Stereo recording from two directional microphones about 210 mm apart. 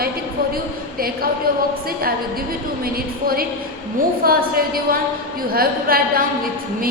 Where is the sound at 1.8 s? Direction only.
45° right (ahead or behind).